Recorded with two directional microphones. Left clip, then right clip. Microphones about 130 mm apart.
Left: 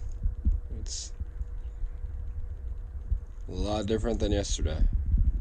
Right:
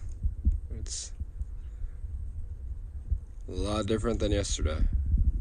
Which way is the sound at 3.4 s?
20° left (ahead or behind).